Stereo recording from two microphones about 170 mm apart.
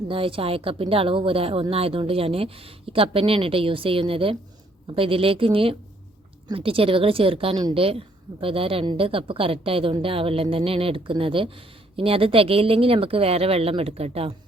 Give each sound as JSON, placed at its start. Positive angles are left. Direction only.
{"t": 0.1, "sound": "a woman's voice", "side_deg": -30}